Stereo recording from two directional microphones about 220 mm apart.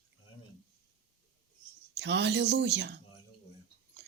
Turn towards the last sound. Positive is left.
turn(degrees=-50)  # may be behind; listen again after turning